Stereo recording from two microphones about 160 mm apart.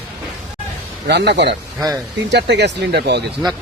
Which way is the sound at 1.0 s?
90° right.